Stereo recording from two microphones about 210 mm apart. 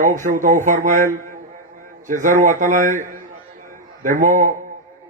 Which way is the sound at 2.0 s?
40° right (ahead or behind).